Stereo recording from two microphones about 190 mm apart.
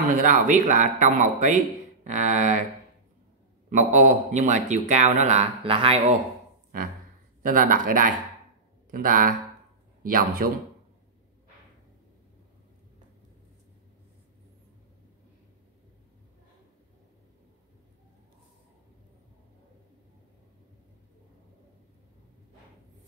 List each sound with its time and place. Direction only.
0.1 s speech: 40° right (ahead or behind)
3.7 s speech: 40° right (ahead or behind)
6.7 s speech: 45° right (ahead or behind)